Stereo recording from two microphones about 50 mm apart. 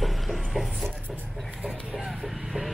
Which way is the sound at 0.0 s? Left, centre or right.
Centre.